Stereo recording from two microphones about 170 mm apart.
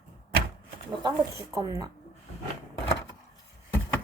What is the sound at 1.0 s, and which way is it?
Speech, 20° right (ahead or behind).